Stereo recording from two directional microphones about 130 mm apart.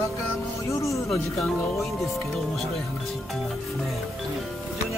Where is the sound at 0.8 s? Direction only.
25° left (ahead or behind).